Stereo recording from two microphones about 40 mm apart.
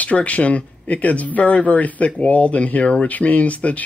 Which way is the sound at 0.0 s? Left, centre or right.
Left.